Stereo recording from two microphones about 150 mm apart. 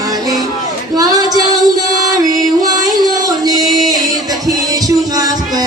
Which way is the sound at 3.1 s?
25° right (ahead or behind).